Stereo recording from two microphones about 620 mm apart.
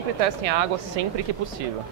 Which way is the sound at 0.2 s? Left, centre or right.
Right.